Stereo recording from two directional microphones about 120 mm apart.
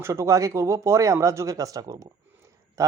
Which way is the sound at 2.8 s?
25° right (ahead or behind).